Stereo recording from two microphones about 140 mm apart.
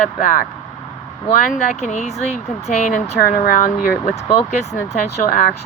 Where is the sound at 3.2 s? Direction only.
80° left.